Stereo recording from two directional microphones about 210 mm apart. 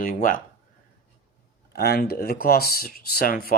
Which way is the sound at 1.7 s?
45° left (ahead or behind).